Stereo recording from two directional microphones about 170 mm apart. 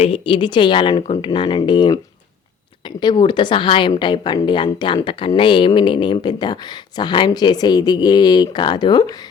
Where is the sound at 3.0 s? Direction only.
25° left (ahead or behind).